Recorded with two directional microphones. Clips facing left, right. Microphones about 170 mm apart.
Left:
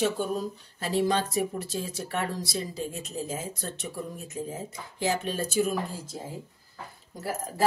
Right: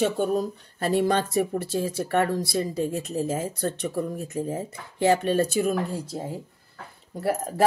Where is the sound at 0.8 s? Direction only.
55° right (ahead or behind).